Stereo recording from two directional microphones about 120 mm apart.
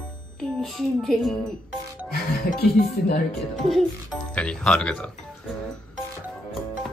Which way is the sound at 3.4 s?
Centre (ahead or behind).